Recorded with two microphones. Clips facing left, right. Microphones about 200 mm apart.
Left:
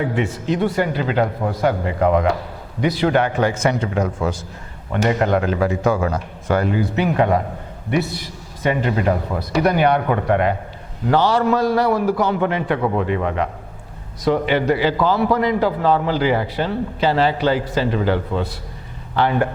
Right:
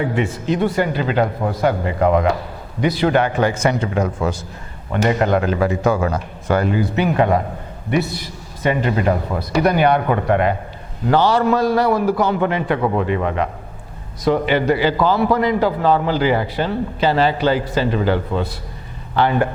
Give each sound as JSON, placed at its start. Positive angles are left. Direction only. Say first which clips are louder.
{"t": 0.0, "sound": "a man's voice", "louder": "right 1 dB", "side_deg": -15}
{"t": 8.6, "sound": "a man's voice", "louder": "right 1 dB", "side_deg": -20}